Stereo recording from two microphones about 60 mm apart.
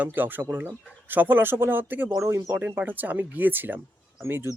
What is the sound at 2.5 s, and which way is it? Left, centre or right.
Speech, right.